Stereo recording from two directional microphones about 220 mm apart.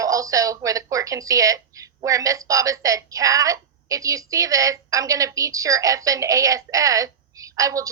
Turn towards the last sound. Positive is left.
turn(degrees=-15)  # may be behind; listen again after turning